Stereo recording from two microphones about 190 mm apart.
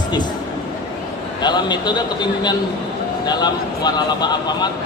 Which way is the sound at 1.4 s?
20° left (ahead or behind).